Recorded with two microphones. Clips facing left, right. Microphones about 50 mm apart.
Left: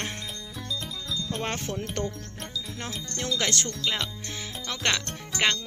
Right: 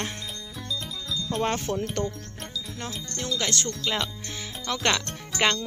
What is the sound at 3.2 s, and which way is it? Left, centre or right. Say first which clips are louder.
Wind chime: even; left.